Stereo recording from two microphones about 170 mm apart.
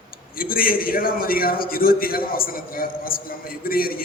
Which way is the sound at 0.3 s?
55° left (ahead or behind).